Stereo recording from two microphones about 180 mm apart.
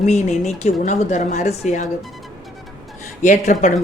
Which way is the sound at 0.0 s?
40° left (ahead or behind).